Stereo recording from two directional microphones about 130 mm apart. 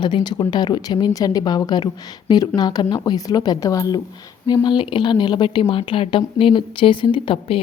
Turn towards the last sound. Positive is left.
turn(degrees=45)  # may be behind; listen again after turning